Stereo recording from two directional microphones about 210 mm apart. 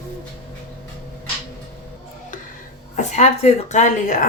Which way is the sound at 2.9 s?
30° left (ahead or behind).